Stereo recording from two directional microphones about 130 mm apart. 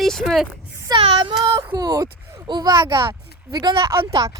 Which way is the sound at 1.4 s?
35° right (ahead or behind).